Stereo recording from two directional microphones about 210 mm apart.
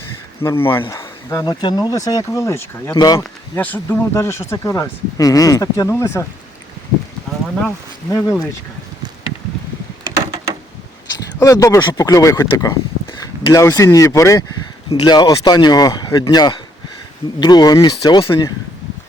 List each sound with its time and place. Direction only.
0.4 s speech: 10° left (ahead or behind)
11.3 s speech: 15° left (ahead or behind)